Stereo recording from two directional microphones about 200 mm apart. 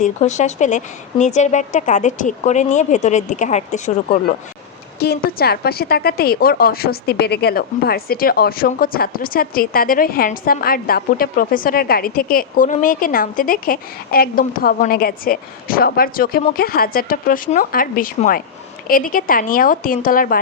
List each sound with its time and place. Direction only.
0.0 s speech: 35° left (ahead or behind)
4.9 s a woman's voice: 50° left (ahead or behind)